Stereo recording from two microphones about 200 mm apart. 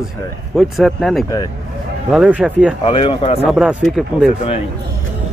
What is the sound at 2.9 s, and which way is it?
Speech, 25° left (ahead or behind).